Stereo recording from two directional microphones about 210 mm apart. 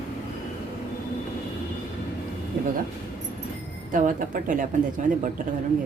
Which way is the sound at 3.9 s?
40° right (ahead or behind).